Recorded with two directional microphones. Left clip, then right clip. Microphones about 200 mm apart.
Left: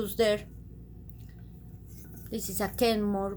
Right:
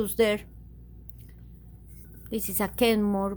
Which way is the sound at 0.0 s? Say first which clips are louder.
Right 2 dB; 40° right (ahead or behind).